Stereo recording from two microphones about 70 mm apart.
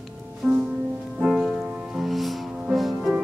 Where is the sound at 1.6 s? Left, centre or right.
Centre.